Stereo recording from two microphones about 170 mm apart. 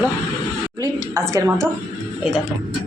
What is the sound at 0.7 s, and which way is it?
Speech, 20° right (ahead or behind).